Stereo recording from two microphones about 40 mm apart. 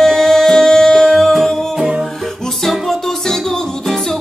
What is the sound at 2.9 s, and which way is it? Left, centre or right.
Music, centre.